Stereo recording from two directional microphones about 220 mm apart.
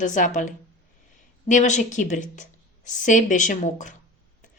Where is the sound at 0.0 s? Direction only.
35° left (ahead or behind).